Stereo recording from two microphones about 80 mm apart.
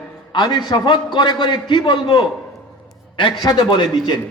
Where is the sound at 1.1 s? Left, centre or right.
Left.